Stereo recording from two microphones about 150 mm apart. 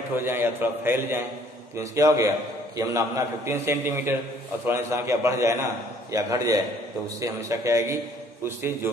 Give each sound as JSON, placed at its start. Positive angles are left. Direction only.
{"t": 0.1, "sound": "a man's voice", "side_deg": -15}